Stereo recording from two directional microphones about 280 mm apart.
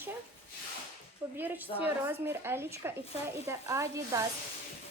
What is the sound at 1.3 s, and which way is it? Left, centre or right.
A woman's voice, centre.